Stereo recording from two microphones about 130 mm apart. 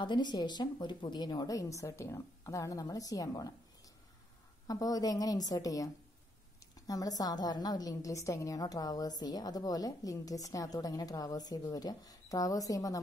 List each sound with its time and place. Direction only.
0.0 s a woman's voice: 35° left (ahead or behind)
4.6 s a woman's voice: 30° left (ahead or behind)
6.9 s a woman's voice: 30° left (ahead or behind)